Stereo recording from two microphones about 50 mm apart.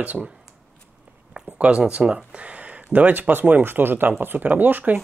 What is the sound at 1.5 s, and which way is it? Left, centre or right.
Speech, right.